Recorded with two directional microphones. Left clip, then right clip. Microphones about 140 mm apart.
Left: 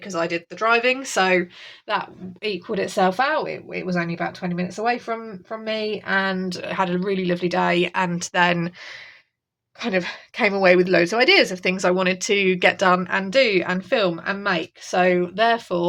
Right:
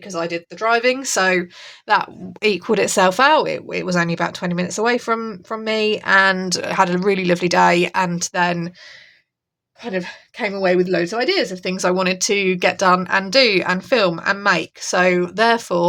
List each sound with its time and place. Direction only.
0.0 s speech: 15° right (ahead or behind); by 1.5 s 35° right (ahead or behind)
1.9 s speech: 50° right (ahead or behind); by 6.5 s 75° right (ahead or behind)
6.5 s a woman's voice: 45° right (ahead or behind)
7.0 s a woman's voice: 55° right (ahead or behind); by 8.1 s 30° right (ahead or behind)
8.1 s speech: 10° right (ahead or behind)
9.8 s speech: 25° left (ahead or behind); by 11.8 s 5° left (ahead or behind)
11.8 s a woman's voice: 20° right (ahead or behind); by 15.9 s 45° right (ahead or behind)